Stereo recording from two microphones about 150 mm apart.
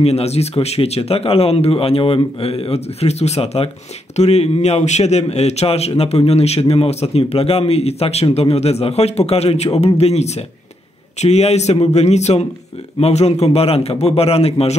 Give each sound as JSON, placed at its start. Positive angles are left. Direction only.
{"t": 0.0, "sound": "a man's voice", "side_deg": 45}